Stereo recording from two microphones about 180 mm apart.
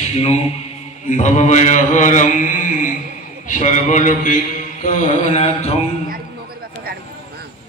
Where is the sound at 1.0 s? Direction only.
40° left (ahead or behind).